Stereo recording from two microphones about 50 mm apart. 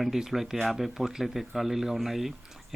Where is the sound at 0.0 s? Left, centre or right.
Centre.